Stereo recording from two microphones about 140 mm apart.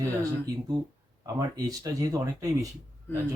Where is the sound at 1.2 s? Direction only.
25° right (ahead or behind).